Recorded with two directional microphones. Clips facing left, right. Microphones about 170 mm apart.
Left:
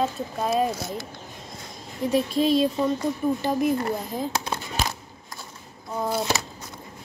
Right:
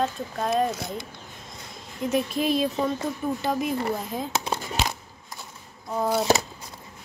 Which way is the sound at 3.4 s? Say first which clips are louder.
Left 2 dB; centre (ahead or behind).